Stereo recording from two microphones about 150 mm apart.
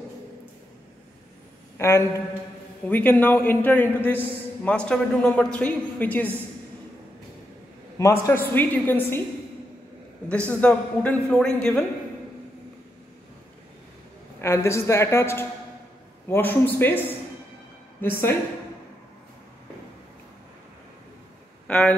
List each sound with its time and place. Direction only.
1.8 s a man's voice: 20° left (ahead or behind)
8.0 s a man's voice: 15° left (ahead or behind)
10.3 s a man's voice: 10° left (ahead or behind)
14.4 s a man's voice: 20° left (ahead or behind)
18.0 s a man's voice: 15° left (ahead or behind)
21.6 s speech: 5° left (ahead or behind)